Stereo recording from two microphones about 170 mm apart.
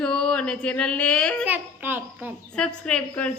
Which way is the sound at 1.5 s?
10° right (ahead or behind).